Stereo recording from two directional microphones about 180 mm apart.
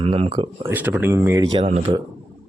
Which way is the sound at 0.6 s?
10° right (ahead or behind).